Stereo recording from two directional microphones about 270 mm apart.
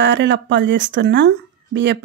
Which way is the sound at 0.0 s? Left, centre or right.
Right.